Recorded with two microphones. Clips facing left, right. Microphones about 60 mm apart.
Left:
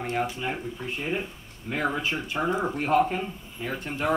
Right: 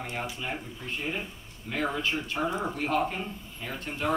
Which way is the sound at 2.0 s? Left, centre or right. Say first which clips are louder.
Left 1 dB; centre.